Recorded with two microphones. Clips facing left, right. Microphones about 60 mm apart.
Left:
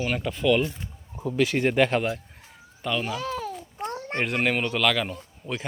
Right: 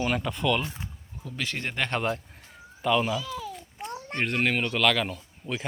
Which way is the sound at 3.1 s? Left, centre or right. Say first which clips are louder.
Left 3 dB; left.